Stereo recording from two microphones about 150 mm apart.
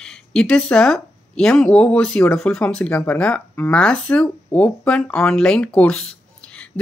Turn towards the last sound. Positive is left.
turn(degrees=5)  # may be behind; listen again after turning